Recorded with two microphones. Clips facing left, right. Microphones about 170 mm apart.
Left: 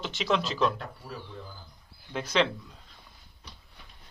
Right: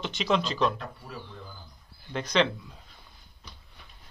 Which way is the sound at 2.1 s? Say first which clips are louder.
Right 1 dB; 5° left (ahead or behind).